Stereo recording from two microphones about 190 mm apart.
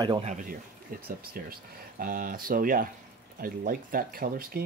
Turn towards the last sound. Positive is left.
turn(degrees=-50)  # may be behind; listen again after turning